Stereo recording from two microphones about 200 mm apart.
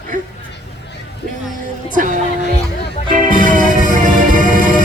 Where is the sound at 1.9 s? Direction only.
40° right (ahead or behind).